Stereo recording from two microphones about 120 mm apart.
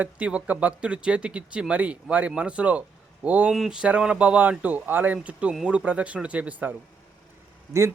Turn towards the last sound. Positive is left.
turn(degrees=-25)  # may be behind; listen again after turning